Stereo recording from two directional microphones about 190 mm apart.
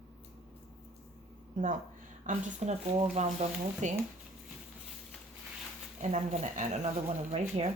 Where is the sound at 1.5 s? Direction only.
40° right (ahead or behind).